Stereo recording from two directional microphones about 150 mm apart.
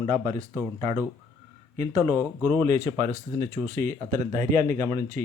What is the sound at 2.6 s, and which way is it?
A man's voice, 50° right (ahead or behind).